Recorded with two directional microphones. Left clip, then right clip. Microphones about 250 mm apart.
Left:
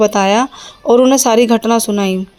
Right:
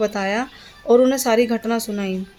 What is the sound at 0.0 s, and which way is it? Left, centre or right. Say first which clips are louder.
Speech: left 10 dB; left.